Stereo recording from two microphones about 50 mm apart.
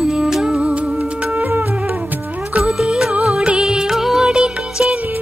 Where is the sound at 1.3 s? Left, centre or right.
Right.